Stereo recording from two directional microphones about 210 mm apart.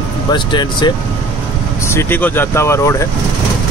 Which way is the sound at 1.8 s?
10° left (ahead or behind).